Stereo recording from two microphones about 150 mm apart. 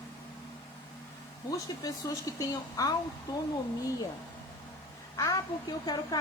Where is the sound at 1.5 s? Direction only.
20° left (ahead or behind).